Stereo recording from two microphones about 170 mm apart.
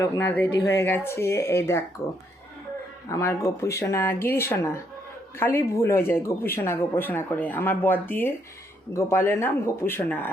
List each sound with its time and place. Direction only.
0.0 s speech: 15° left (ahead or behind)
3.1 s speech: 20° left (ahead or behind)